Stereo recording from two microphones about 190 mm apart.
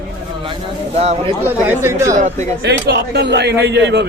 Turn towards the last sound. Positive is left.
turn(degrees=-65)  # may be behind; listen again after turning